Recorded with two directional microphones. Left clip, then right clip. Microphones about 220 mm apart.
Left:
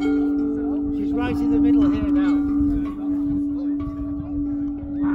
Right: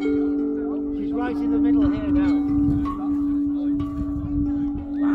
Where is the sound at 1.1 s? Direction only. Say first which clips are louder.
Left 2 dB; 45° left (ahead or behind).